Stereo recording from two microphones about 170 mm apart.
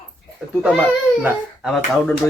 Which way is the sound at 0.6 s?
5° right (ahead or behind).